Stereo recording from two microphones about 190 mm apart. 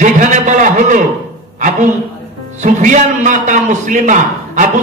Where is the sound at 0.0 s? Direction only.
40° right (ahead or behind).